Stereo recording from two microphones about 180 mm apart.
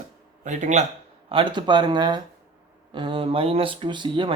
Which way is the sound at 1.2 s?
30° right (ahead or behind).